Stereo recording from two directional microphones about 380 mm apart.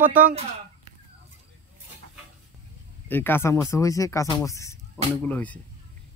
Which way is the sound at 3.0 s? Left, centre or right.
Centre.